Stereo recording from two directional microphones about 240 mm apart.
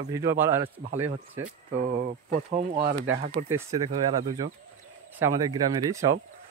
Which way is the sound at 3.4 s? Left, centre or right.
Centre.